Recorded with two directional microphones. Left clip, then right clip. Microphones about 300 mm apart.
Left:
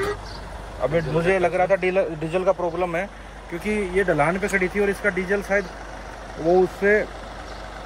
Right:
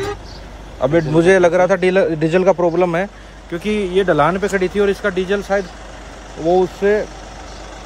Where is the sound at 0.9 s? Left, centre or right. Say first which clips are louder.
Right 9 dB; right.